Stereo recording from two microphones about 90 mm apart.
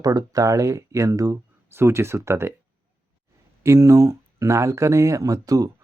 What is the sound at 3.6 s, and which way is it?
Speech, 30° right (ahead or behind).